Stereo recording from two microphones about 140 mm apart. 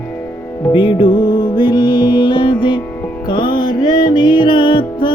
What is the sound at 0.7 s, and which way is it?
Music, 35° left (ahead or behind).